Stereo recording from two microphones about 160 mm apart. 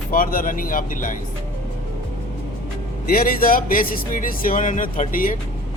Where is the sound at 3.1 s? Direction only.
65° left (ahead or behind).